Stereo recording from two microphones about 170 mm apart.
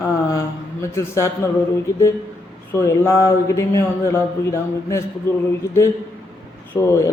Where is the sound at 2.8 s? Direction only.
15° left (ahead or behind).